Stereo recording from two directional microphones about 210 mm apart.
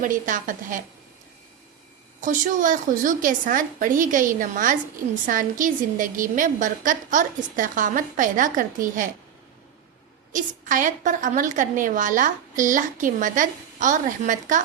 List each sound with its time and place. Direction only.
0.0 s a woman's voice: 40° right (ahead or behind)
2.2 s a woman's voice: 35° right (ahead or behind)
10.3 s a woman's voice: 40° right (ahead or behind)